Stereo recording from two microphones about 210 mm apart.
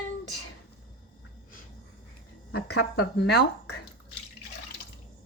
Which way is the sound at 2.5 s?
55° left (ahead or behind).